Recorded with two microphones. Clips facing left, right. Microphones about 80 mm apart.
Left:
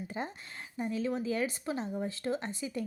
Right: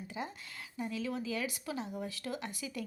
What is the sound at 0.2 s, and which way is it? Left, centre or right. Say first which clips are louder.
A woman's voice: left 1 dB; left.